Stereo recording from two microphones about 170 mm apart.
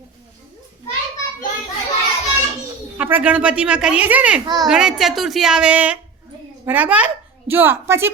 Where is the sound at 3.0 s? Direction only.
10° right (ahead or behind).